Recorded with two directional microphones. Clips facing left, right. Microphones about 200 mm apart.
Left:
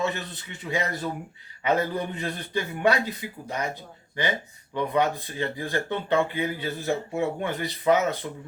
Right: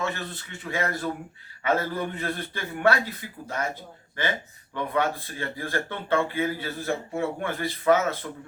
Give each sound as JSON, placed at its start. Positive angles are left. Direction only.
{"t": 0.0, "sound": "speech", "side_deg": 15}